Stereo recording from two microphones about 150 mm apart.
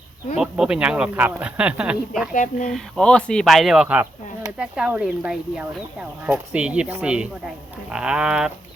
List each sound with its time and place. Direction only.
0.3 s speech: 5° right (ahead or behind)
2.3 s speech: 60° left (ahead or behind)
2.6 s speech: centre (ahead or behind)